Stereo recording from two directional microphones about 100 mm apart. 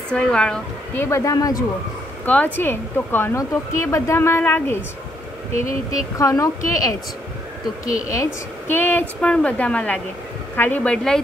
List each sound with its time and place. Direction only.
0.1 s a woman's voice: 10° left (ahead or behind)
0.9 s speech: 25° left (ahead or behind)
2.2 s speech: 15° left (ahead or behind)
5.5 s speech: 30° left (ahead or behind)
8.1 s a woman's voice: 25° left (ahead or behind)